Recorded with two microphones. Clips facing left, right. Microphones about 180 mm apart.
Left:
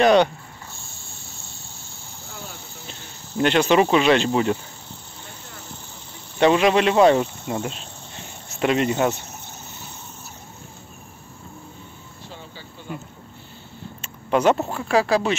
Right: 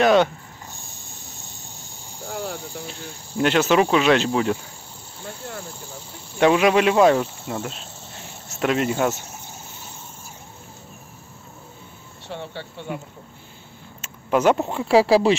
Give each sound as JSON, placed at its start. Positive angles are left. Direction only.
{"t": 0.0, "sound": "speech", "side_deg": 0}
{"t": 0.8, "sound": "snake", "side_deg": -15}
{"t": 2.9, "sound": "speech", "side_deg": -5}
{"t": 6.4, "sound": "speech", "side_deg": -5}
{"t": 12.3, "sound": "a sound", "side_deg": -70}
{"t": 14.0, "sound": "a sound", "side_deg": -5}
{"t": 14.7, "sound": "speech", "side_deg": -25}